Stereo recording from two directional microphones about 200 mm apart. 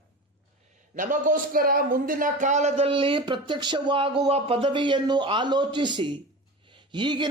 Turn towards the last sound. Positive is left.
turn(degrees=-25)  # may be behind; listen again after turning